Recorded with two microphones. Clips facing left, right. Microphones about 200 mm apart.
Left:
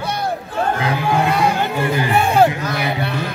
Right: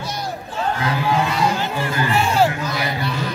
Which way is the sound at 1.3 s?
60° left (ahead or behind).